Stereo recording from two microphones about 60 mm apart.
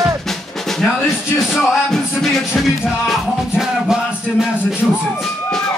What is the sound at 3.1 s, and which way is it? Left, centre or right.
Music, centre.